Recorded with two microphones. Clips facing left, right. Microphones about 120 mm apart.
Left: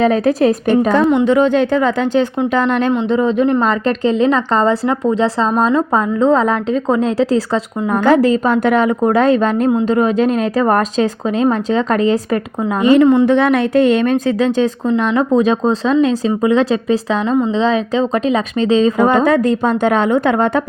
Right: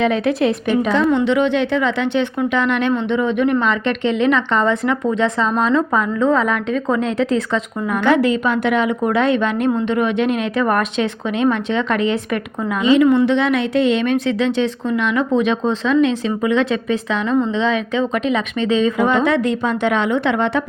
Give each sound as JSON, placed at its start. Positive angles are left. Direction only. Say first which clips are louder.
{"t": 0.0, "sound": "speech", "louder": "left 4 dB", "side_deg": 40}
{"t": 13.2, "sound": "speech", "louder": "left 4 dB", "side_deg": 45}